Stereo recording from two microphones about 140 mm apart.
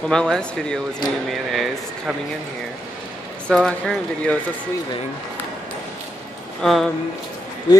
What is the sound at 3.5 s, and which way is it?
Speech, 5° left (ahead or behind).